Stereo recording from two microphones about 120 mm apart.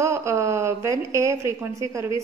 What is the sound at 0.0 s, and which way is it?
A woman's voice, 25° right (ahead or behind).